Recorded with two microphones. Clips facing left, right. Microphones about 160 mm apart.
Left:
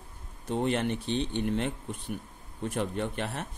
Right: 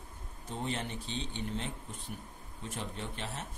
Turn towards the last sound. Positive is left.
turn(degrees=60)  # may be behind; listen again after turning